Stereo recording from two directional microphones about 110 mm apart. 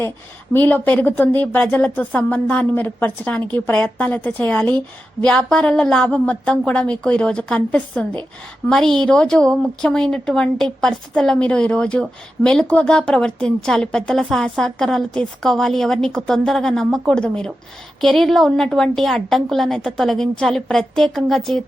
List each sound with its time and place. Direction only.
0.5 s a woman's voice: 15° left (ahead or behind)